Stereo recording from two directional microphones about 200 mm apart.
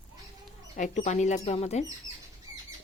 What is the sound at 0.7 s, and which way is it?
Speech, 40° left (ahead or behind).